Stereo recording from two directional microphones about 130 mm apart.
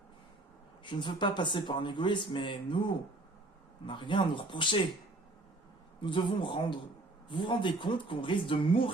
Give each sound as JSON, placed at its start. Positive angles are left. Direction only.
{"t": 0.9, "sound": "speech", "side_deg": 35}
{"t": 3.8, "sound": "speech", "side_deg": 40}
{"t": 6.0, "sound": "speech", "side_deg": 40}